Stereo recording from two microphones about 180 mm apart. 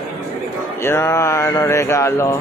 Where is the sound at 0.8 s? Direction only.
15° left (ahead or behind).